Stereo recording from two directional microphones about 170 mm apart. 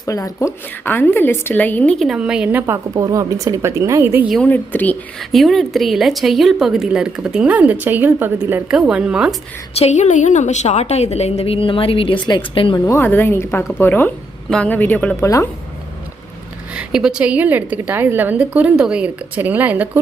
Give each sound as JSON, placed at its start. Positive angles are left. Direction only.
{"t": 0.0, "sound": "a woman's voice", "side_deg": 20}
{"t": 4.3, "sound": "a woman's voice", "side_deg": 5}
{"t": 9.7, "sound": "a woman's voice", "side_deg": 40}
{"t": 12.8, "sound": "a woman's voice", "side_deg": 15}
{"t": 16.7, "sound": "a woman's voice", "side_deg": -5}